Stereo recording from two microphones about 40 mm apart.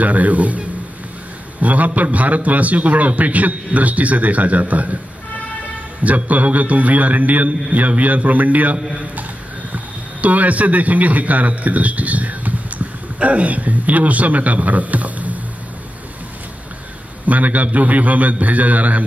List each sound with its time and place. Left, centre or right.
0.0 s a man's voice: right
6.0 s a man's voice: right
10.2 s a man's voice: right
17.3 s a man's voice: right